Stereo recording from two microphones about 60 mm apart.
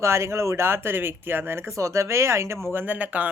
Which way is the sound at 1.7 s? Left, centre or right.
Right.